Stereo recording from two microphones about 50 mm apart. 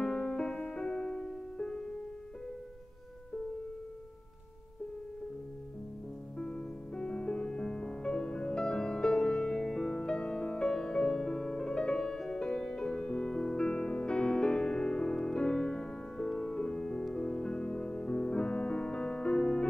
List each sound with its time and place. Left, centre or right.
0.0 s music: centre
6.3 s music: centre